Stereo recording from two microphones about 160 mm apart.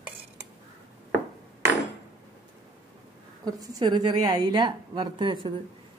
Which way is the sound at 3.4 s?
25° right (ahead or behind).